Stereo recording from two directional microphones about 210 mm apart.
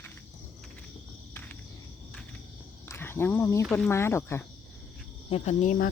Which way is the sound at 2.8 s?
10° left (ahead or behind).